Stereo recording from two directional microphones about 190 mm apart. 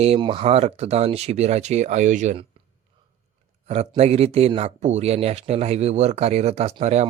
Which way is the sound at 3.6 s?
35° right (ahead or behind).